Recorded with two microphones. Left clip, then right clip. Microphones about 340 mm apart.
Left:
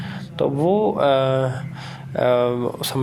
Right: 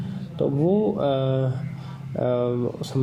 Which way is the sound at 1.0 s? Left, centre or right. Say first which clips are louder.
Left 6 dB; left.